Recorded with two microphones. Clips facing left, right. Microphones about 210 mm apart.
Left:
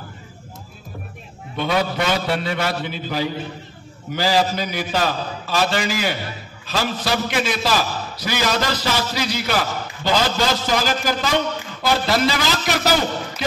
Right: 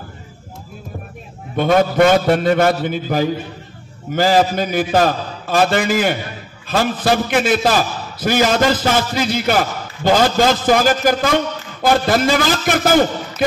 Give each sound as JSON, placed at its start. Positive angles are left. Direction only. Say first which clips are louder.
{"t": 1.6, "sound": "a man's voice", "louder": "right 8 dB", "side_deg": -50}